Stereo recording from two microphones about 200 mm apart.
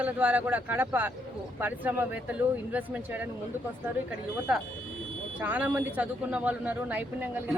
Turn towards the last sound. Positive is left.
turn(degrees=-10)  # may be behind; listen again after turning